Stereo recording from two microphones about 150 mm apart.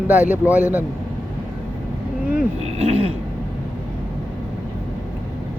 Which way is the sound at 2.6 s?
45° right (ahead or behind).